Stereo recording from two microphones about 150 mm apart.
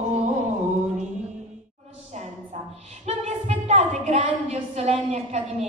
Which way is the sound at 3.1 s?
50° right (ahead or behind).